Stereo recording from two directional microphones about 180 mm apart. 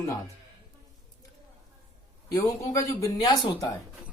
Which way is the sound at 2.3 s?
20° left (ahead or behind).